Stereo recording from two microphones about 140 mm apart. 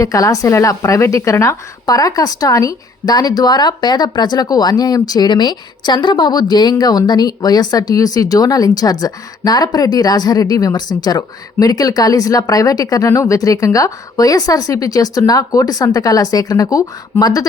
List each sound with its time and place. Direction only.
0.0 s a woman's voice: 25° left (ahead or behind)